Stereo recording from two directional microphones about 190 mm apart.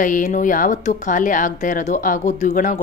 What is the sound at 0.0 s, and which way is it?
Speech, 40° left (ahead or behind).